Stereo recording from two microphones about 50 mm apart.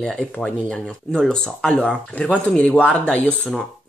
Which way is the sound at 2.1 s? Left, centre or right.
Left.